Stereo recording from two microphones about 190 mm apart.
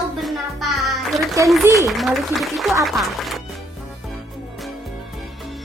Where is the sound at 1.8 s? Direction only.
Centre (ahead or behind).